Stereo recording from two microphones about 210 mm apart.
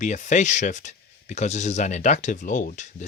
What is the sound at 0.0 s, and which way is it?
Speech, 35° left (ahead or behind).